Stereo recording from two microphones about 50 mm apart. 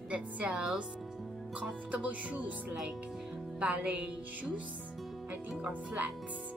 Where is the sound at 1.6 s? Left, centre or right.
Right.